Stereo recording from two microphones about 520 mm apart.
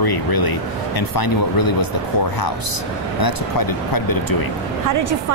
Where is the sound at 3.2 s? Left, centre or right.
Left.